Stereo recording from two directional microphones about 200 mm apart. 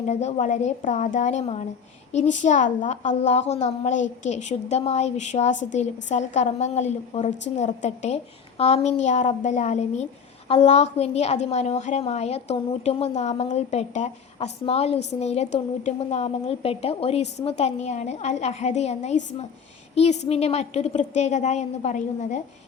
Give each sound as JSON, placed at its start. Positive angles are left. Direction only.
{"t": 0.1, "sound": "a woman's voice", "side_deg": 35}